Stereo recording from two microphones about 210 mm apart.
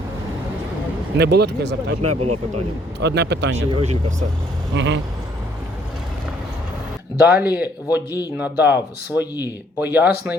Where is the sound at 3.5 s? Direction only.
30° right (ahead or behind).